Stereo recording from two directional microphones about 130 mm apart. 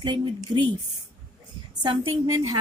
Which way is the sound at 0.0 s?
35° right (ahead or behind).